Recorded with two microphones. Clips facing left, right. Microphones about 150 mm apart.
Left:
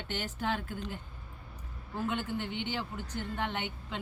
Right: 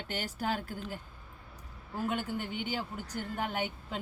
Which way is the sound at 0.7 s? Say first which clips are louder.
Left 1 dB; 5° right (ahead or behind).